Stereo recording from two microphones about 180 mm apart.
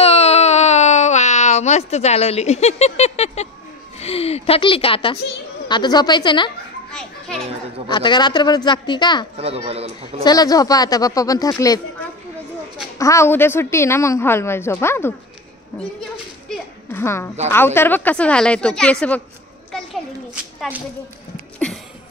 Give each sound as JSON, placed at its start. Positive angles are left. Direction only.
{"t": 0.0, "sound": "baby cry", "side_deg": 35}
{"t": 4.0, "sound": "speech", "side_deg": 35}
{"t": 6.9, "sound": "children playing", "side_deg": 5}
{"t": 7.9, "sound": "speech", "side_deg": 25}
{"t": 9.4, "sound": "speech", "side_deg": -35}
{"t": 10.2, "sound": "speech", "side_deg": 20}
{"t": 12.9, "sound": "a woman's voice", "side_deg": 15}
{"t": 16.4, "sound": "a sound", "side_deg": 15}
{"t": 17.5, "sound": "a woman's voice", "side_deg": 15}